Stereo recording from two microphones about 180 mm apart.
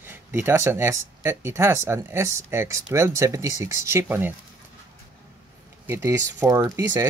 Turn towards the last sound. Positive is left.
turn(degrees=-15)  # may be behind; listen again after turning